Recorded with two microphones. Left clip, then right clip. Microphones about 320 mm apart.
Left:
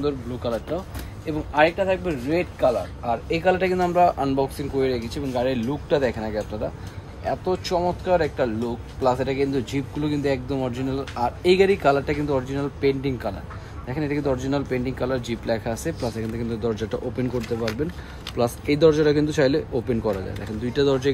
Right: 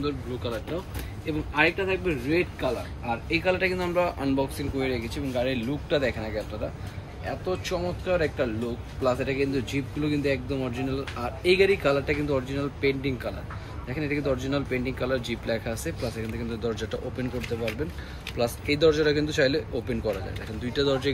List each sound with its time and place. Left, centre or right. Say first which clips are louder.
0.0 s speech: left 5 dB; left